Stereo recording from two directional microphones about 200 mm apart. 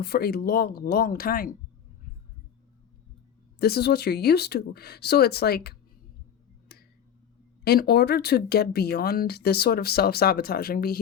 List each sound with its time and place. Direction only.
0.0 s speech: 50° left (ahead or behind)
3.6 s speech: 55° left (ahead or behind)
6.7 s tick-tock: 55° left (ahead or behind)
7.6 s speech: 50° left (ahead or behind)